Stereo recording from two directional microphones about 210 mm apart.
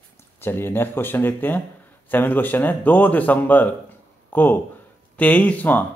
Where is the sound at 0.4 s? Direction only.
10° left (ahead or behind).